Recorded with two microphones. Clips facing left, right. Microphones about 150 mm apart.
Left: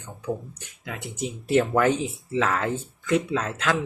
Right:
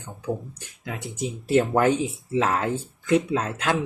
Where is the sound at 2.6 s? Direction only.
10° right (ahead or behind).